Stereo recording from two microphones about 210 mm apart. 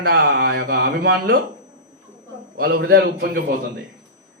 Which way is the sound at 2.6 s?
50° right (ahead or behind).